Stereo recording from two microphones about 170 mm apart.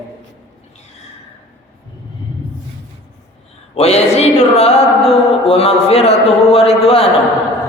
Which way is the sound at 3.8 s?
40° left (ahead or behind).